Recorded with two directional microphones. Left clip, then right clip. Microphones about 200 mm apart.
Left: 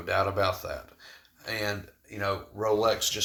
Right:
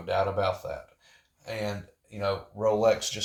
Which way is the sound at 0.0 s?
25° left (ahead or behind).